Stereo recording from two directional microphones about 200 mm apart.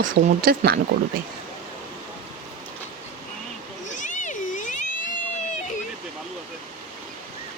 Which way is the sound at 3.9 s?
40° left (ahead or behind).